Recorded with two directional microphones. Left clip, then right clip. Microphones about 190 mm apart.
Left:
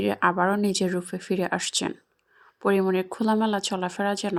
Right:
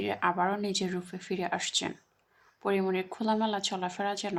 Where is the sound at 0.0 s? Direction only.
35° left (ahead or behind).